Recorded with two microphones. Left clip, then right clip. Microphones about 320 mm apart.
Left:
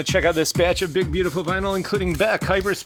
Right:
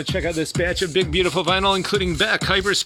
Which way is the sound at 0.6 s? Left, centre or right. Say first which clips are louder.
Right 1 dB; centre.